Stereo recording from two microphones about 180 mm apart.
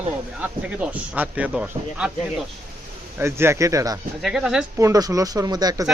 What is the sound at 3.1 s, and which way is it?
Speech, 15° right (ahead or behind).